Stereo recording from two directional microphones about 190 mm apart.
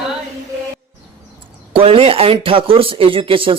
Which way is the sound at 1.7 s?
30° right (ahead or behind).